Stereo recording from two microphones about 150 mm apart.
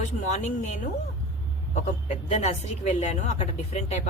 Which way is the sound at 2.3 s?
50° left (ahead or behind).